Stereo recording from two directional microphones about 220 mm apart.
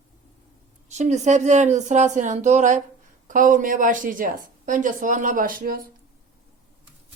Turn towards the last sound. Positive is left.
turn(degrees=-40)  # may be behind; listen again after turning